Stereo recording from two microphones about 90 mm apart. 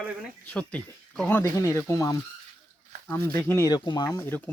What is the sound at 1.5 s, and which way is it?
Speech, 30° left (ahead or behind).